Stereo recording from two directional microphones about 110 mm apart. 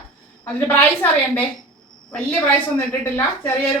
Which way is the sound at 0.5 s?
20° left (ahead or behind).